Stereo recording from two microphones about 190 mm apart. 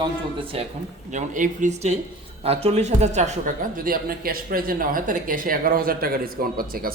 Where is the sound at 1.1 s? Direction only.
40° right (ahead or behind).